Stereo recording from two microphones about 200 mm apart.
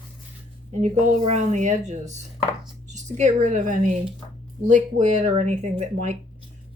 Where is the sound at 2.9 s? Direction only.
35° right (ahead or behind).